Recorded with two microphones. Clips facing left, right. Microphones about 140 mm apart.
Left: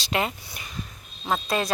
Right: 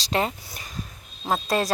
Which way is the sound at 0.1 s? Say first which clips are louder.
Right 2 dB; 35° right (ahead or behind).